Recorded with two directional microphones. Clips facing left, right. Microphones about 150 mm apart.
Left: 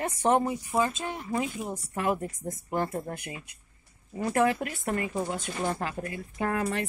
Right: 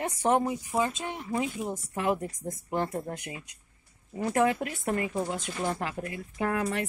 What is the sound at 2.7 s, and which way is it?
Speech, 20° right (ahead or behind).